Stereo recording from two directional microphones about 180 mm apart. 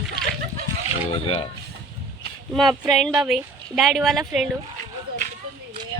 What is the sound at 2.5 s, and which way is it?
Speech, centre (ahead or behind).